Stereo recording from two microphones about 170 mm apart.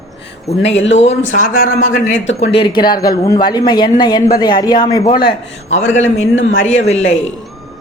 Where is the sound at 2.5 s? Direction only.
25° left (ahead or behind).